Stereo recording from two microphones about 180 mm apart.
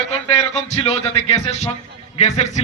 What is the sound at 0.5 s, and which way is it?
A man's voice, 40° left (ahead or behind).